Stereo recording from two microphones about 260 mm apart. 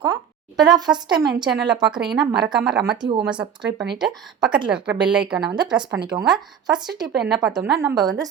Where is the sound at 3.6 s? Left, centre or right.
Right.